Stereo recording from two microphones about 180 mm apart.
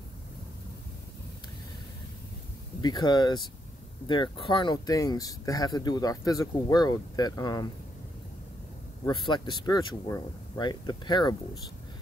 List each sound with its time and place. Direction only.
2.8 s speech: 25° left (ahead or behind)
9.0 s speech: 25° left (ahead or behind)